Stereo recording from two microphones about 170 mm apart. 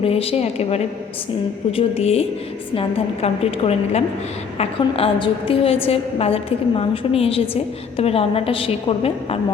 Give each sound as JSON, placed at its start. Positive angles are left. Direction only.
{"t": 0.0, "sound": "a woman's voice", "side_deg": 35}